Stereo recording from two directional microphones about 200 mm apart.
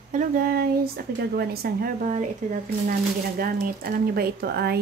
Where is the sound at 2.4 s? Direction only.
40° right (ahead or behind).